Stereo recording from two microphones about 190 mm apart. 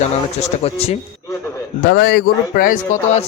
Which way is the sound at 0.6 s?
30° left (ahead or behind).